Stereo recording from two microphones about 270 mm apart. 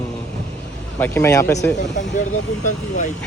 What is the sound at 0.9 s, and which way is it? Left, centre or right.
Speech, centre.